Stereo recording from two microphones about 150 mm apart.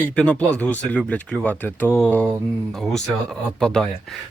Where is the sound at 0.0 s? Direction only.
10° left (ahead or behind).